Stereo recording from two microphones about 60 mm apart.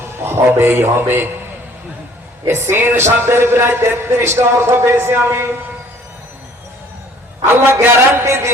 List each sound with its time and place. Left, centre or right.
0.0 s a man's voice: right
2.5 s speech: right
7.5 s a man's voice: right
8.2 s speech: right